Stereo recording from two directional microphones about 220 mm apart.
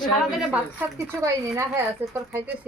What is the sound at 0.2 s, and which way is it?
A woman's voice, 5° right (ahead or behind).